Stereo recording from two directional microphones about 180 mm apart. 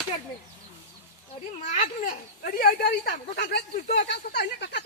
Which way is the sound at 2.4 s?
55° left (ahead or behind).